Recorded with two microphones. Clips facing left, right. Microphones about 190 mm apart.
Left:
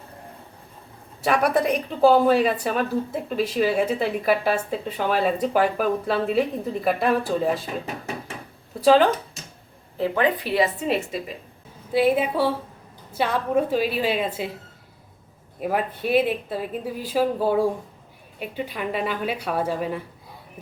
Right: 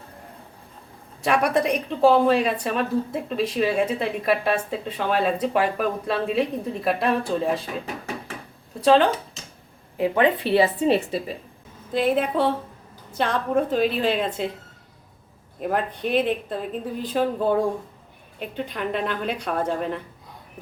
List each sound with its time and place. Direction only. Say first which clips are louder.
1.2 s speech: even; 5° left (ahead or behind)
8.8 s speech: left 1 dB; 5° left (ahead or behind)
10.0 s a woman's voice: right 2 dB; 25° right (ahead or behind)
11.9 s speech: left 2 dB; 5° left (ahead or behind)
15.6 s speech: even; 5° left (ahead or behind)